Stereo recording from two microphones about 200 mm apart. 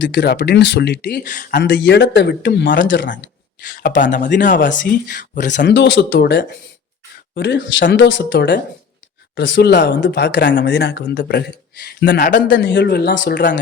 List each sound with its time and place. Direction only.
0.0 s speech: 60° left (ahead or behind)
1.3 s speech: 45° left (ahead or behind); by 3.1 s 65° left (ahead or behind)
3.6 s speech: 40° left (ahead or behind)
5.5 s speech: 60° left (ahead or behind); by 12.5 s 45° left (ahead or behind)
12.5 s speech: 65° left (ahead or behind)